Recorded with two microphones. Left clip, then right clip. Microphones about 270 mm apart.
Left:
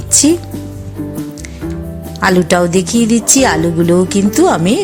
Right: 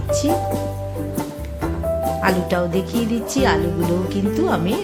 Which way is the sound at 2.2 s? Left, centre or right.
Left.